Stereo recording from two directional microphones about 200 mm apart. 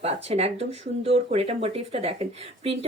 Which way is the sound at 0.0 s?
30° right (ahead or behind).